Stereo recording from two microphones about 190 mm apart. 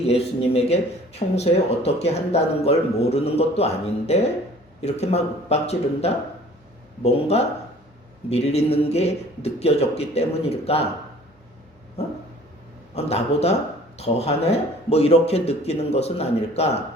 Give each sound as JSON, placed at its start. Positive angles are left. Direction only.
{"t": 0.1, "sound": "speech", "side_deg": 30}
{"t": 12.9, "sound": "speech", "side_deg": 35}